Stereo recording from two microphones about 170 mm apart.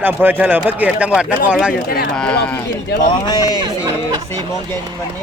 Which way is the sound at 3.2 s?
25° left (ahead or behind).